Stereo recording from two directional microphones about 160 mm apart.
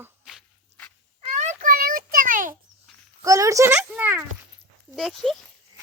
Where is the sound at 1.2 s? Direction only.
50° right (ahead or behind).